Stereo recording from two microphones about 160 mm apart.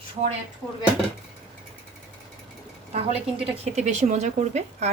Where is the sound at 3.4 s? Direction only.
40° right (ahead or behind).